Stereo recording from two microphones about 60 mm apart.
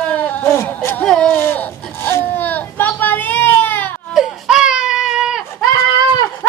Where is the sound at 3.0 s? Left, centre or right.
Left.